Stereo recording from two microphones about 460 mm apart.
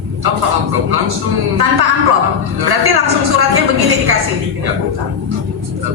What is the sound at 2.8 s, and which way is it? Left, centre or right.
Speech, right.